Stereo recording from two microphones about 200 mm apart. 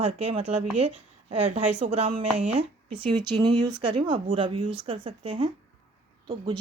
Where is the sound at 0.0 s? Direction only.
30° right (ahead or behind).